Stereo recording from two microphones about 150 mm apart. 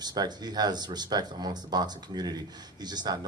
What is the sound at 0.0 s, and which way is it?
Speech, 25° right (ahead or behind).